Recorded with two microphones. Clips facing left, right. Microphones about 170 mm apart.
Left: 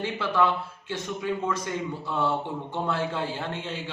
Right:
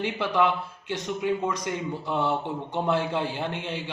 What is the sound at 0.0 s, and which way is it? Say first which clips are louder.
A man's voice: right 1 dB; 15° right (ahead or behind).